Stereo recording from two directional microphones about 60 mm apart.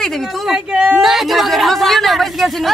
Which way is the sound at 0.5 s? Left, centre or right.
Centre.